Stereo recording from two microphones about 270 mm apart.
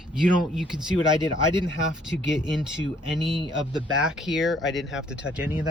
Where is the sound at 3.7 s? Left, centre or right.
Centre.